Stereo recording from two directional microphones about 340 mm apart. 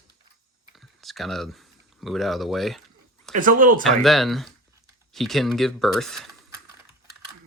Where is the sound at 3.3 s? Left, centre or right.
Right.